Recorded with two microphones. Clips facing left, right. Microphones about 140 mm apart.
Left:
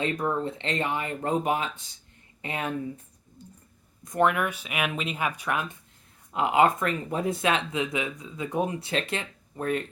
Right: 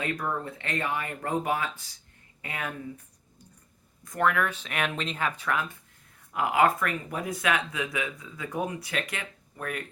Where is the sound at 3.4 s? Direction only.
25° left (ahead or behind).